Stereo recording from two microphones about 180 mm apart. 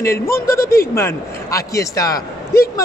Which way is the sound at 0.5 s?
55° left (ahead or behind).